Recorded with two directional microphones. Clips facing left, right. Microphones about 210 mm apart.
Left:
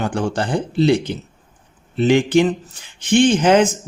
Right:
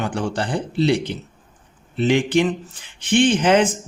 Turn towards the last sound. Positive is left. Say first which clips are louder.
# left 2 dB
turn(degrees=45)  # may be behind; listen again after turning